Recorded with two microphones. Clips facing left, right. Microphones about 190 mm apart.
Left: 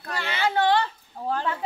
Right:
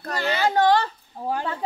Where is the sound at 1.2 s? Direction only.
15° right (ahead or behind).